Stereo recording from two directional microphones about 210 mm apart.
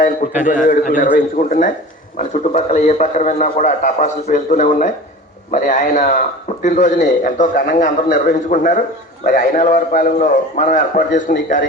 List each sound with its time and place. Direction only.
0.4 s speech: 40° left (ahead or behind)